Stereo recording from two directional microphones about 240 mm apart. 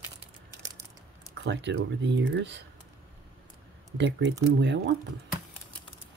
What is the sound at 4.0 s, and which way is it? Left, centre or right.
Speech, right.